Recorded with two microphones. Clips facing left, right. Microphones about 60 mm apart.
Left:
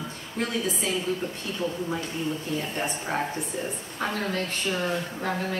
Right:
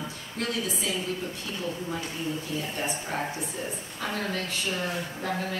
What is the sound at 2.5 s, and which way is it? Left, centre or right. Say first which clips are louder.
Speech: left 2 dB; left.